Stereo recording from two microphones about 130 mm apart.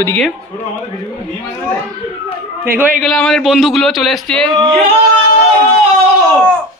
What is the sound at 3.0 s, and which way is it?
A man's voice, centre (ahead or behind).